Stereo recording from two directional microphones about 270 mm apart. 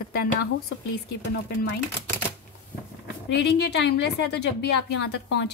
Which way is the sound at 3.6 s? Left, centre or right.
Left.